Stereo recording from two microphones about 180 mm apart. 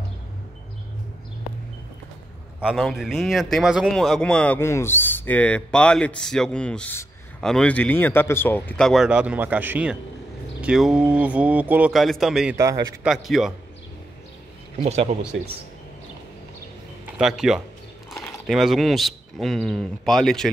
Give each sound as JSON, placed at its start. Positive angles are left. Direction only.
{"t": 2.6, "sound": "a man's voice", "side_deg": 0}
{"t": 12.5, "sound": "a man's voice", "side_deg": -20}
{"t": 13.0, "sound": "a man's voice", "side_deg": 0}
{"t": 14.8, "sound": "speech", "side_deg": -35}
{"t": 17.0, "sound": "a man's voice", "side_deg": -5}